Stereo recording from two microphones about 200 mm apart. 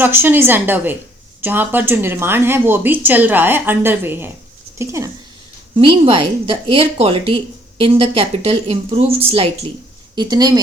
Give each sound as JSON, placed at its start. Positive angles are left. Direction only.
{"t": 0.0, "sound": "a woman's voice", "side_deg": -10}
{"t": 5.7, "sound": "speech", "side_deg": -25}